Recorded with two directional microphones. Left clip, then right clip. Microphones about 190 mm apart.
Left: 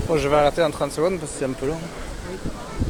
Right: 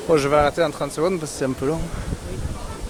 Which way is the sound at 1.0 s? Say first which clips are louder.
Right 2 dB; 30° right (ahead or behind).